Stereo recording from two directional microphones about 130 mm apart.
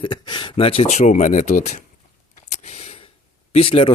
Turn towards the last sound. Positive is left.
turn(degrees=45)  # may be behind; listen again after turning